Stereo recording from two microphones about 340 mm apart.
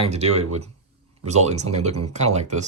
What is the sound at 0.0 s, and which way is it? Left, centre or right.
Speech, centre.